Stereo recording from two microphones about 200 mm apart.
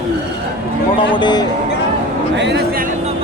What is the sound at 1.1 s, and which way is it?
Speech, 20° left (ahead or behind).